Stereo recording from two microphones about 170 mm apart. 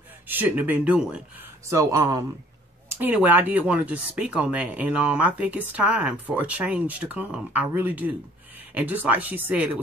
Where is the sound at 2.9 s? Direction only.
10° right (ahead or behind).